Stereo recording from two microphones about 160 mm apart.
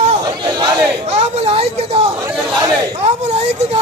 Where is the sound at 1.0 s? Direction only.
40° right (ahead or behind).